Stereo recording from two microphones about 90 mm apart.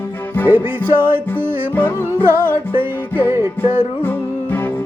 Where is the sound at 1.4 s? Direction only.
25° right (ahead or behind).